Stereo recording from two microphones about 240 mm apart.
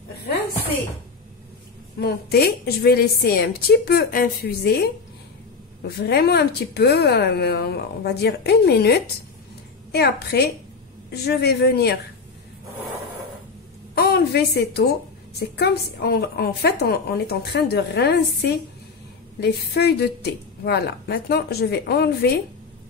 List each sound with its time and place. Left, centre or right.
2.0 s a woman's voice: left
6.0 s a woman's voice: left
13.9 s a woman's voice: left